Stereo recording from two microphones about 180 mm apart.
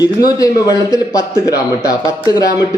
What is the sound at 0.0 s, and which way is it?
A man's voice, 20° left (ahead or behind).